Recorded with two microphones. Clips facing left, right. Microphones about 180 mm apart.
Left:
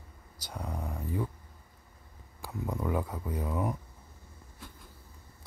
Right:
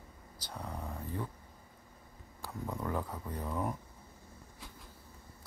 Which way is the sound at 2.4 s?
10° left (ahead or behind).